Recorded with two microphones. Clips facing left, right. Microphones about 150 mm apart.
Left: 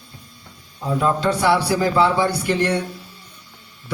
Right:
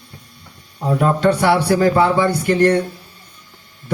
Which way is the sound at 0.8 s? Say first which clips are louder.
Right 4 dB; 60° right (ahead or behind).